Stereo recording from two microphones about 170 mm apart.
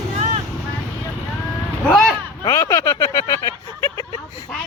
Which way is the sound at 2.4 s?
20° left (ahead or behind).